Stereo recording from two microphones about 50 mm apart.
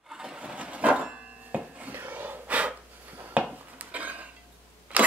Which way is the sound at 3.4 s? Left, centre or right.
Right.